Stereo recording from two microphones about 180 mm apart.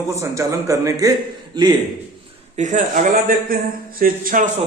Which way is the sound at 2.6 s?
45° right (ahead or behind).